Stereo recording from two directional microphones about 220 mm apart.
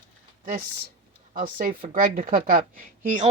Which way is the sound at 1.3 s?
40° right (ahead or behind).